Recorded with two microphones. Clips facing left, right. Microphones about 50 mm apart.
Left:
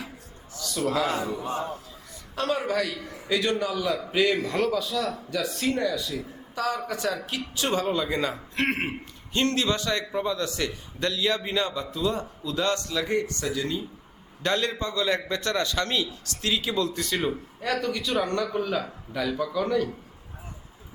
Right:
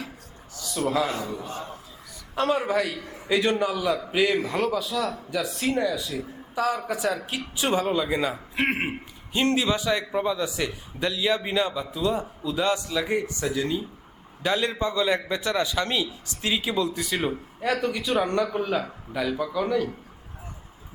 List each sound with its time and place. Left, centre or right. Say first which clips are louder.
0.6 s a sound: right 1 dB; centre
1.0 s a man's voice: left 2 dB; left
2.3 s a man's voice: right 3 dB; right
4.0 s a man's voice: right 1 dB; centre